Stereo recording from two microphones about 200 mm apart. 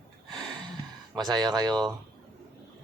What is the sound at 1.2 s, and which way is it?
Speech, 20° right (ahead or behind).